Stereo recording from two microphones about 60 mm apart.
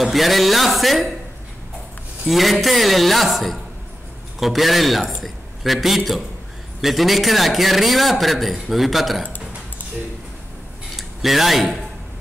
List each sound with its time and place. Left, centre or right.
0.0 s a man's voice: centre
2.2 s a man's voice: centre
11.0 s speech: centre